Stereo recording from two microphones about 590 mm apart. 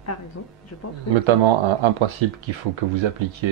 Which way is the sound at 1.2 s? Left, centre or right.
Right.